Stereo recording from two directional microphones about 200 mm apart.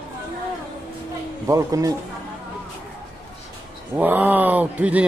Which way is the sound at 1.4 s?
15° right (ahead or behind).